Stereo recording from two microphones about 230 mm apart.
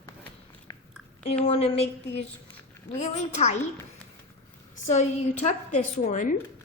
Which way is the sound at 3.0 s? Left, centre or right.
Left.